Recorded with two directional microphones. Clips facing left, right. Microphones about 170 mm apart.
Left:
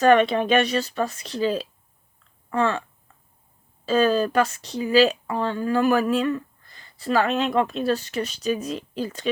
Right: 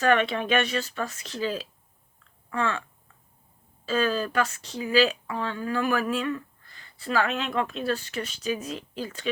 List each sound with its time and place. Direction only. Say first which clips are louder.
0.0 s speech: left 6 dB; 35° left (ahead or behind)
3.8 s speech: left 6 dB; 35° left (ahead or behind)